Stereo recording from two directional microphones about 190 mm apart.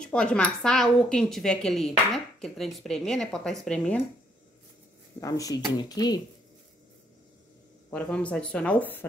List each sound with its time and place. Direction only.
0.0 s a woman's voice: 5° left (ahead or behind)
5.2 s speech: 20° left (ahead or behind)
7.9 s speech: 5° left (ahead or behind)